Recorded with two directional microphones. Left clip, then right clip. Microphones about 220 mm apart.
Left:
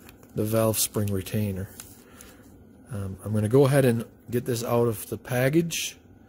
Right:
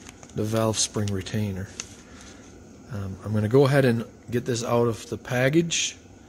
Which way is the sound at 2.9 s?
10° left (ahead or behind).